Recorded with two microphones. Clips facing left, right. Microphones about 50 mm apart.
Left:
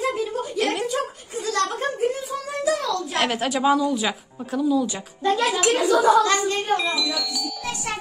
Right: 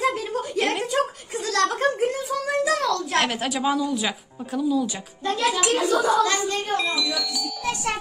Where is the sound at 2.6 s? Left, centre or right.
Right.